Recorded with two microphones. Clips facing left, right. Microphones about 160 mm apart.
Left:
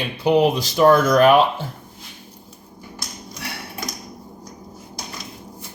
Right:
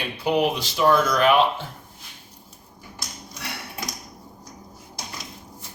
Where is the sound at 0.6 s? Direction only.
45° left (ahead or behind).